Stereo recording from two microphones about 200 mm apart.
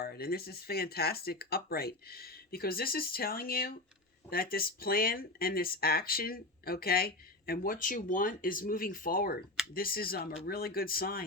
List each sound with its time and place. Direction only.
0.0 s speech: 50° left (ahead or behind)